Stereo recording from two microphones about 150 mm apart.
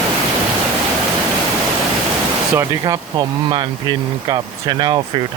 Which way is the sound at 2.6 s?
25° right (ahead or behind).